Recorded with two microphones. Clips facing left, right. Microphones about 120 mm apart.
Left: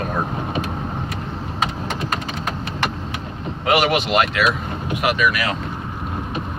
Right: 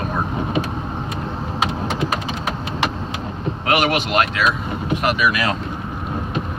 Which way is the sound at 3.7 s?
Centre (ahead or behind).